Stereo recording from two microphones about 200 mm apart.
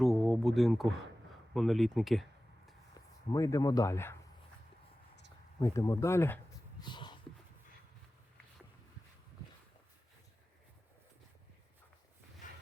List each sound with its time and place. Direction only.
0.0 s speech: centre (ahead or behind)
3.3 s speech: 15° left (ahead or behind)
5.5 s speech: 20° left (ahead or behind)
6.8 s a sound: 20° left (ahead or behind)